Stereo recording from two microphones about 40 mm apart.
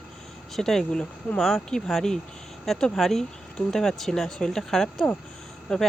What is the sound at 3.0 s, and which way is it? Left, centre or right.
Speech, centre.